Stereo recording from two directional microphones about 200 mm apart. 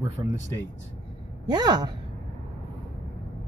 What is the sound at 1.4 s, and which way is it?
Speech, 20° right (ahead or behind).